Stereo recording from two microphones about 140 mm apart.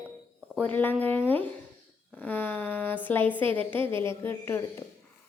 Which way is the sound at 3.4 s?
40° right (ahead or behind).